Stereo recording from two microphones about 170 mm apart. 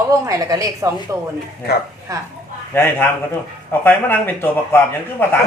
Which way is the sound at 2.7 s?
15° left (ahead or behind).